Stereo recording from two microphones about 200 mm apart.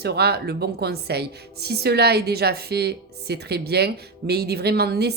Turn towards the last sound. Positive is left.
turn(degrees=-55)  # may be behind; listen again after turning